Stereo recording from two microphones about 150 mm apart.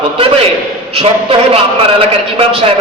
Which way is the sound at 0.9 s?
40° right (ahead or behind).